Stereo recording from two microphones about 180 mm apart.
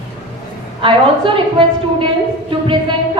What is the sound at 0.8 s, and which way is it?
A woman's voice, 30° right (ahead or behind).